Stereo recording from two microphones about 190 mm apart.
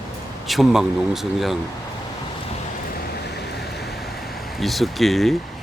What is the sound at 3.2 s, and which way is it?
Vehicle, 60° left (ahead or behind).